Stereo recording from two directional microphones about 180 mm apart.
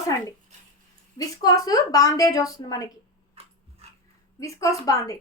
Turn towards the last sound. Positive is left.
turn(degrees=20)  # may be behind; listen again after turning